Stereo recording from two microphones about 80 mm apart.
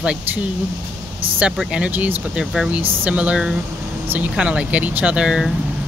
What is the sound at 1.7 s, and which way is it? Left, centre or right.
Speech, centre.